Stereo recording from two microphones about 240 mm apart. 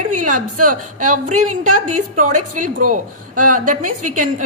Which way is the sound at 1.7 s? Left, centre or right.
Right.